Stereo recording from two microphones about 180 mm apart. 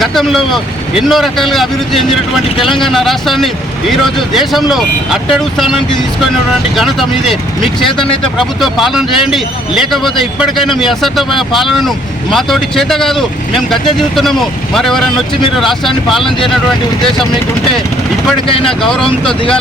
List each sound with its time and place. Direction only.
0.0 s speech: centre (ahead or behind)
18.4 s speech: 30° left (ahead or behind)
18.8 s speech: 5° left (ahead or behind)